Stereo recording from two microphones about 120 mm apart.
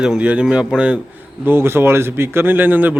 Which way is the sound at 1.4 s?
20° right (ahead or behind).